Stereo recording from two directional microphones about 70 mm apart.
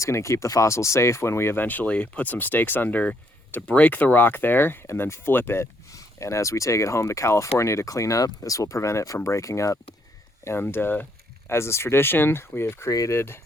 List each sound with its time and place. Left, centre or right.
0.0 s speech: left
1.6 s speech: left
5.9 s speech: left
10.4 s speech: left
12.9 s speech: left
13.1 s speech: left